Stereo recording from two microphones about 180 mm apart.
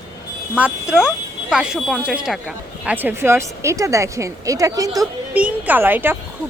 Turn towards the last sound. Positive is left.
turn(degrees=-10)  # may be behind; listen again after turning